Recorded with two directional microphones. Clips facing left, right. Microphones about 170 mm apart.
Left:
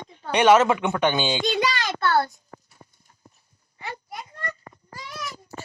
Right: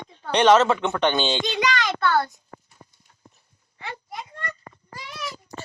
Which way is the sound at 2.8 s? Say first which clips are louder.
Right 1 dB; 10° left (ahead or behind).